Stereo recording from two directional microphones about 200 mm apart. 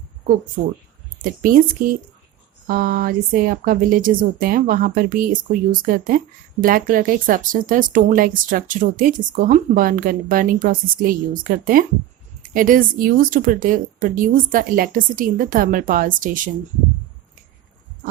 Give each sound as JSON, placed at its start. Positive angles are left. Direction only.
{"t": 0.6, "sound": "speech", "side_deg": -35}